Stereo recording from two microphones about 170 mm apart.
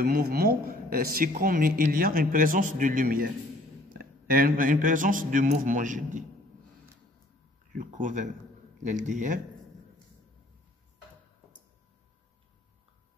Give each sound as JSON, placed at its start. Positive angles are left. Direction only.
{"t": 0.0, "sound": "a man's voice", "side_deg": -60}
{"t": 7.7, "sound": "a man's voice", "side_deg": -50}